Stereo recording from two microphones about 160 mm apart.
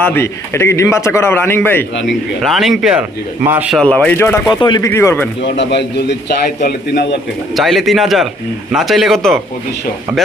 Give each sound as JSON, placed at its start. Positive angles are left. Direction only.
{"t": 0.0, "sound": "a man's voice", "side_deg": 15}
{"t": 2.0, "sound": "speech", "side_deg": 0}
{"t": 3.8, "sound": "a man's voice", "side_deg": 5}
{"t": 4.6, "sound": "speech", "side_deg": 30}
{"t": 4.9, "sound": "a man's voice", "side_deg": 15}
{"t": 5.4, "sound": "a man's voice", "side_deg": 90}
{"t": 7.5, "sound": "speech", "side_deg": 0}